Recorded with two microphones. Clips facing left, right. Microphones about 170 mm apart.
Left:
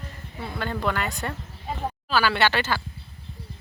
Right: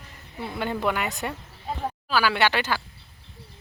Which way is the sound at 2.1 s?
10° right (ahead or behind).